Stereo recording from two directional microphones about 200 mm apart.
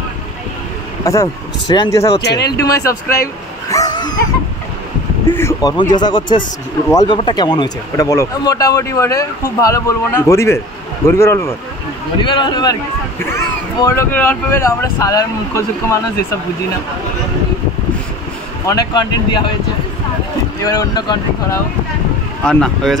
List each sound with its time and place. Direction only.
1.0 s speech: 15° left (ahead or behind)
2.2 s speech: 55° left (ahead or behind)
2.6 s speech: 15° left (ahead or behind)
3.7 s dog: 20° left (ahead or behind)
5.3 s speech: 15° left (ahead or behind)
12.2 s speech: 25° left (ahead or behind)
18.7 s speech: 20° left (ahead or behind)
20.6 s speech: 20° left (ahead or behind)
22.4 s speech: 5° left (ahead or behind)